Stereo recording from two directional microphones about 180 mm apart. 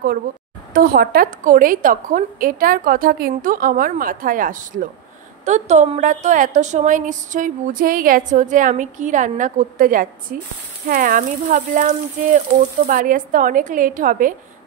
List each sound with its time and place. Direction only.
0.7 s a woman's voice: 55° right (ahead or behind)